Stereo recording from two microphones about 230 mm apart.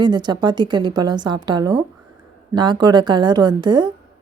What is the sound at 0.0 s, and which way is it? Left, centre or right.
A woman's voice, centre.